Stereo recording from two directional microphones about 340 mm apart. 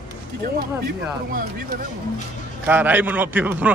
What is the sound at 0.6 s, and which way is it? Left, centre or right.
Speech, right.